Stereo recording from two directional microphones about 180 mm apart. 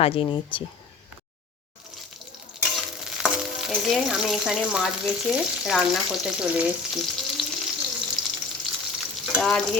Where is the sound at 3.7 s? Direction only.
Centre (ahead or behind).